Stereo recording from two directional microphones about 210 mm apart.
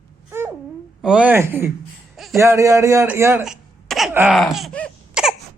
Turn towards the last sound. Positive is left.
turn(degrees=0)  # may be behind; listen again after turning